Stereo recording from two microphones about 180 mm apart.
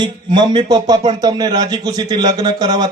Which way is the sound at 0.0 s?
25° right (ahead or behind).